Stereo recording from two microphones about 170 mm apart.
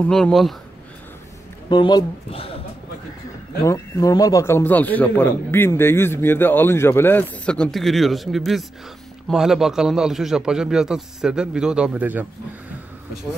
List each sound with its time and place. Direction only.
0.0 s a man's voice: 5° left (ahead or behind)
1.7 s speech: 25° left (ahead or behind)
3.6 s a man's voice: 20° left (ahead or behind); by 12.3 s 10° right (ahead or behind)